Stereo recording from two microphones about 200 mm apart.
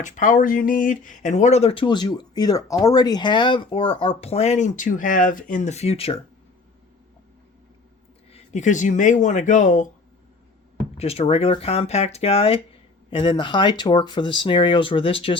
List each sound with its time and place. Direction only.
0.0 s speech: 40° left (ahead or behind)
8.3 s speech: 35° left (ahead or behind)
10.9 s speech: 30° left (ahead or behind)